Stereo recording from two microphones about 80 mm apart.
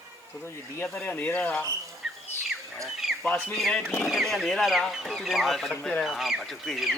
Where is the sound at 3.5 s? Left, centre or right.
Centre.